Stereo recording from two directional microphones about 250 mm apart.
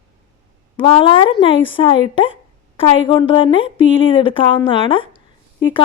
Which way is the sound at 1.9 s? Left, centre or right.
Left.